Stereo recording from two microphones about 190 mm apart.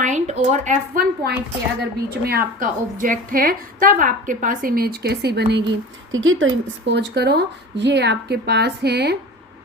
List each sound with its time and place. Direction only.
0.0 s a woman's voice: 40° right (ahead or behind); by 5.6 s 60° right (ahead or behind)
6.1 s a woman's voice: 90° right; by 9.1 s 60° right (ahead or behind)